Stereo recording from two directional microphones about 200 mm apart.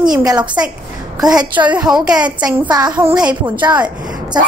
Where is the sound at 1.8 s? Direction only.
5° right (ahead or behind).